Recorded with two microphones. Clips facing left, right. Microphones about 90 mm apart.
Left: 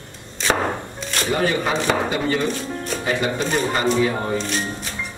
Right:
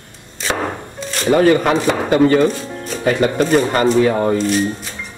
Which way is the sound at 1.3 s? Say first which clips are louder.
Right 9 dB; 50° right (ahead or behind).